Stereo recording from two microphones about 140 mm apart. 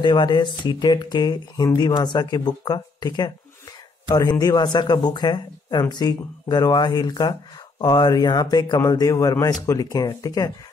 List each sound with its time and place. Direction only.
0.0 s a man's voice: 35° left (ahead or behind)